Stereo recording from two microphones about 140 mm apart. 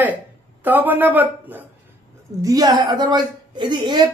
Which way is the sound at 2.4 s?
25° right (ahead or behind).